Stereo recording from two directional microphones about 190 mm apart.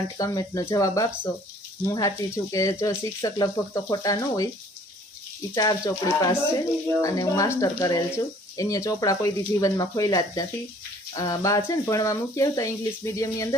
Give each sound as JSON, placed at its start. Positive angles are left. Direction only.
{"t": 0.2, "sound": "speech", "side_deg": 20}
{"t": 5.5, "sound": "speech", "side_deg": 20}